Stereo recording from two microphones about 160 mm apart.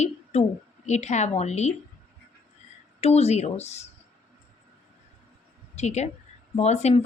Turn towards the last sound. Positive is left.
turn(degrees=40)  # may be behind; listen again after turning